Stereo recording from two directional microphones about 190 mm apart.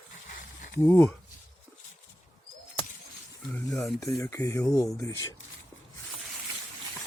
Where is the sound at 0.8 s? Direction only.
10° left (ahead or behind).